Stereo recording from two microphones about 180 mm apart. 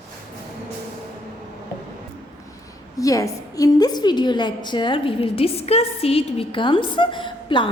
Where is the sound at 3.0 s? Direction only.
20° left (ahead or behind).